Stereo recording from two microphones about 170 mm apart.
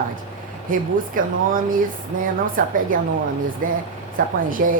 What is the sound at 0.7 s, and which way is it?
A woman's voice, 55° right (ahead or behind).